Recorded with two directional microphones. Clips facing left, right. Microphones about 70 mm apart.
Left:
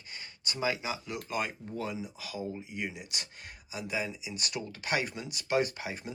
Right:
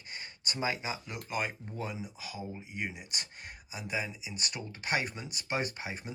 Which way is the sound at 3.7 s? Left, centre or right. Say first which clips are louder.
Left 2 dB; right.